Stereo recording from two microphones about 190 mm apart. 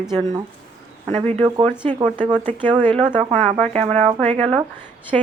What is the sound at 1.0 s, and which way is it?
Speech, 35° right (ahead or behind).